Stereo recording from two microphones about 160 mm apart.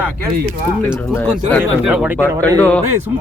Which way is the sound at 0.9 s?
10° left (ahead or behind).